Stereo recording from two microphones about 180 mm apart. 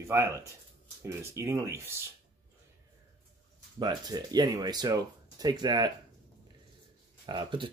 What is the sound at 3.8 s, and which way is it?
Speech, 20° right (ahead or behind).